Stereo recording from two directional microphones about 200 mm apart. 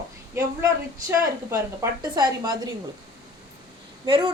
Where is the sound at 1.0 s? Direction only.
15° right (ahead or behind).